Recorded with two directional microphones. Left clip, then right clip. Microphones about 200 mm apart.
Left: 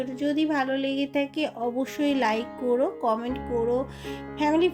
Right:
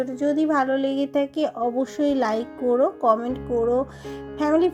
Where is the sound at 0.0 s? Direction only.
10° right (ahead or behind).